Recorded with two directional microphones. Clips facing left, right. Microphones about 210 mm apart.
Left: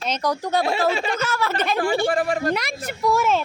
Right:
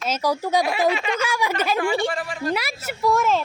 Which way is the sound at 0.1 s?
5° right (ahead or behind).